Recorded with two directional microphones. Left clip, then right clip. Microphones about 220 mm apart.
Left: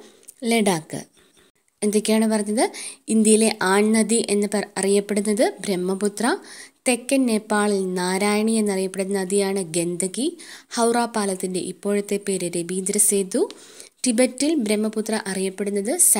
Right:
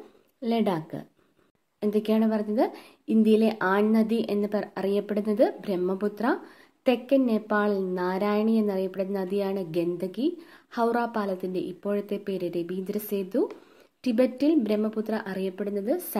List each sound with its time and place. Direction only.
0.4 s a woman's voice: 30° left (ahead or behind)